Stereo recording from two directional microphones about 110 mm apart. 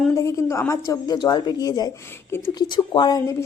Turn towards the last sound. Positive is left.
turn(degrees=45)  # may be behind; listen again after turning